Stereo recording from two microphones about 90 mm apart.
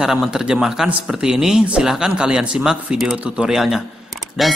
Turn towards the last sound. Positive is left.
turn(degrees=0)  # may be behind; listen again after turning